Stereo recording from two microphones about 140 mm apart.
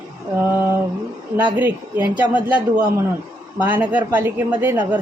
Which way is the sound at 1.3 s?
15° right (ahead or behind).